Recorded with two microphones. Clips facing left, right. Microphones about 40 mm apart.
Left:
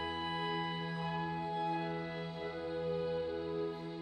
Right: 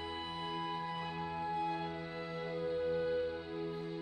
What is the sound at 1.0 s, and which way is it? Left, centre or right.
Music, centre.